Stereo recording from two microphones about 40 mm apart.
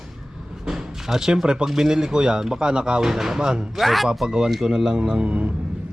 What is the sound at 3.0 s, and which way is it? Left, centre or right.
Speech, centre.